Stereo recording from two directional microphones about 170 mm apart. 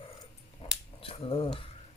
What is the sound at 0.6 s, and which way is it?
Finger snapping, 35° left (ahead or behind).